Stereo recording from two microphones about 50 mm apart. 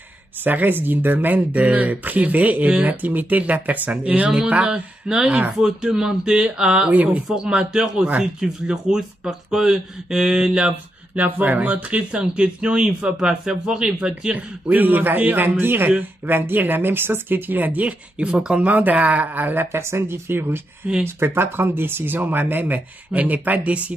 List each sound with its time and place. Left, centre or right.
0.4 s speech: right
5.6 s speech: centre
6.9 s speech: right
7.2 s speech: centre
11.1 s speech: right; by 14.3 s centre
14.3 s speech: right
17.8 s speech: right
18.7 s speech: right